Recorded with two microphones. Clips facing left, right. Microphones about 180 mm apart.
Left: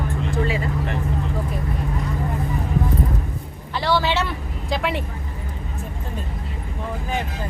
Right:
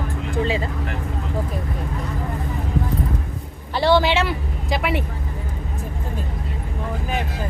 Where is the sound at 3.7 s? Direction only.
25° right (ahead or behind).